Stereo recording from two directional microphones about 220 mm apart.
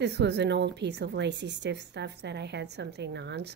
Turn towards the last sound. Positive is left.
turn(degrees=-50)  # may be behind; listen again after turning